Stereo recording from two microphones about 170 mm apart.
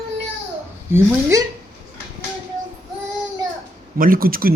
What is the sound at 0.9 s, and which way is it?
Speech, 20° right (ahead or behind).